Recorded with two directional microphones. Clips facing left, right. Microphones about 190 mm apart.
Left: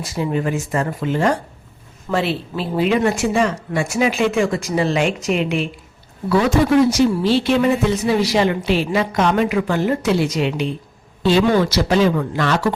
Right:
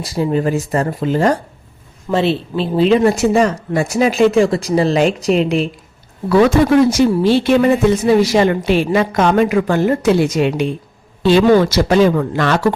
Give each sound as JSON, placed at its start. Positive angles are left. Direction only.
{"t": 0.0, "sound": "speech", "side_deg": -35}
{"t": 2.0, "sound": "speech", "side_deg": -25}
{"t": 6.9, "sound": "a woman's voice", "side_deg": -55}
{"t": 11.2, "sound": "a woman's voice", "side_deg": -60}